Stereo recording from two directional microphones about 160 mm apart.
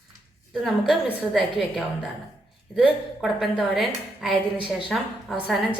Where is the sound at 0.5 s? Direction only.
Centre (ahead or behind).